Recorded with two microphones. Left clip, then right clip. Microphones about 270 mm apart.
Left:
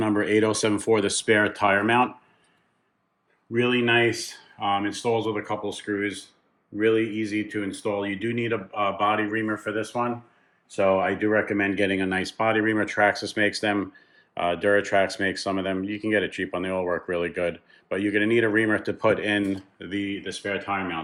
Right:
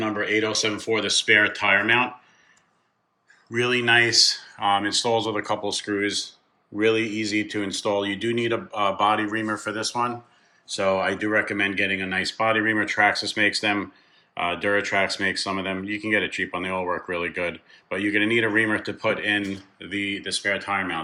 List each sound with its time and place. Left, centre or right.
0.0 s speech: left
3.5 s speech: centre